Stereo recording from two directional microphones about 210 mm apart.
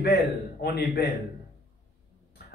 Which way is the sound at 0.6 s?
50° left (ahead or behind).